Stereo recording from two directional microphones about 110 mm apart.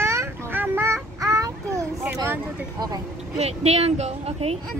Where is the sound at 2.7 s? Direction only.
35° right (ahead or behind).